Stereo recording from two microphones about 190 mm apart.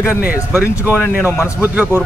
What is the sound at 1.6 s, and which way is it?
Speech, 10° right (ahead or behind).